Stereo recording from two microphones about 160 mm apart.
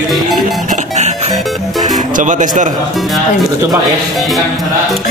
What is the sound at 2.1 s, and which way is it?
Speech, 55° right (ahead or behind).